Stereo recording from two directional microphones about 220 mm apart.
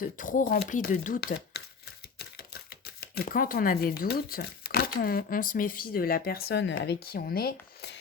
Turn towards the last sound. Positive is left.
turn(degrees=45)  # may be behind; listen again after turning